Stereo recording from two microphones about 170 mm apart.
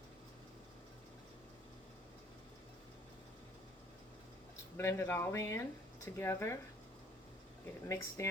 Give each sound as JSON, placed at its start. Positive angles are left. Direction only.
{"t": 4.8, "sound": "speech", "side_deg": 15}
{"t": 7.9, "sound": "speech", "side_deg": 15}